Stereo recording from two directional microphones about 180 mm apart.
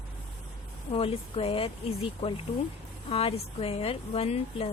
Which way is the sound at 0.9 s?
30° left (ahead or behind).